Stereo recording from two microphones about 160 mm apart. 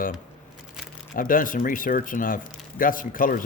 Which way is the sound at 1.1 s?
60° left (ahead or behind).